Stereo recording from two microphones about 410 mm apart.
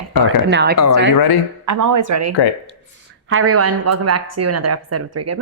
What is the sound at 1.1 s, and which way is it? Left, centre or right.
Speech, left.